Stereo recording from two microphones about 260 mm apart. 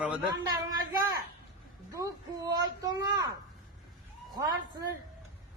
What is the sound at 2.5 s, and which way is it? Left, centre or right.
Speech, centre.